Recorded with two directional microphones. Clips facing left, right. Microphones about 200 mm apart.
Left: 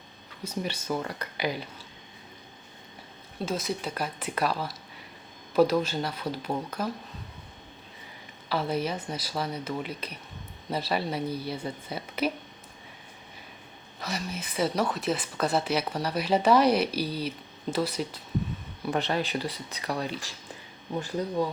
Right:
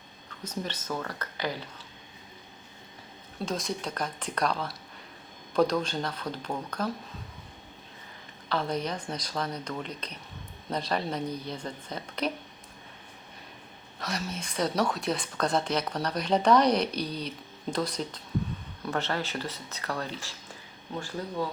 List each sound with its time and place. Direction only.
0.4 s speech: 10° left (ahead or behind)
3.4 s speech: 5° left (ahead or behind)
8.4 s speech: 5° left (ahead or behind)
14.0 s speech: 5° left (ahead or behind)